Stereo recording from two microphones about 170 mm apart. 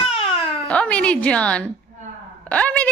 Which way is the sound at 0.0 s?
35° left (ahead or behind).